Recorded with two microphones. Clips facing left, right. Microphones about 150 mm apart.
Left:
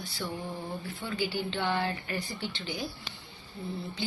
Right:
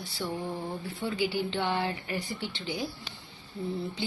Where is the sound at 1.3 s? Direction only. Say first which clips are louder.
Right 1 dB; 25° right (ahead or behind).